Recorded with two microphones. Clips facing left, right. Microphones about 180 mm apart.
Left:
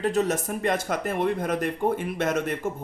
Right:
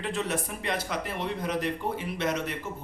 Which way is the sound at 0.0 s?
40° left (ahead or behind).